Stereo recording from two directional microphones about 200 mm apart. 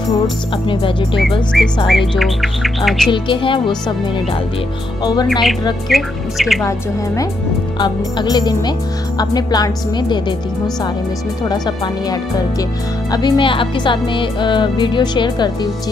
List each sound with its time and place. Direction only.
1.9 s speech: centre (ahead or behind)
3.1 s speech: 25° left (ahead or behind)
5.0 s speech: 20° left (ahead or behind)
5.3 s speech: centre (ahead or behind)
7.8 s speech: 20° left (ahead or behind)
11.4 s speech: 20° left (ahead or behind)